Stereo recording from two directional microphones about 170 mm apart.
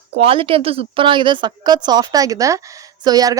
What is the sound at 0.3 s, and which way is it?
Speech, 30° right (ahead or behind).